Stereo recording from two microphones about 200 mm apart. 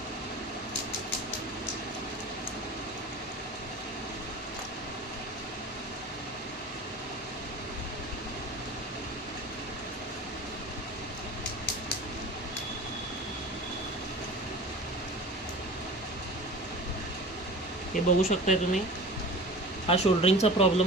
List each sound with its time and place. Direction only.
17.9 s speech: 35° left (ahead or behind)
19.9 s speech: 30° left (ahead or behind)